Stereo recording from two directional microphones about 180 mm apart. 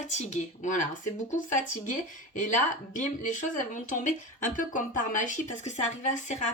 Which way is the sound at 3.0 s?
45° left (ahead or behind).